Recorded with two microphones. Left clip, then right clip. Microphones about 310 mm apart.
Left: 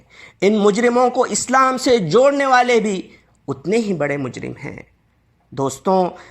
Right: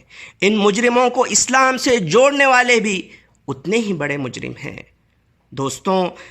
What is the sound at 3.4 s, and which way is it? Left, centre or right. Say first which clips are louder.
A man's voice: even; centre.